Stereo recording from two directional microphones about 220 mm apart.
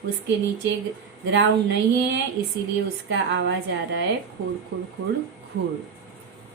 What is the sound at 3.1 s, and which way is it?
Speech, 55° right (ahead or behind).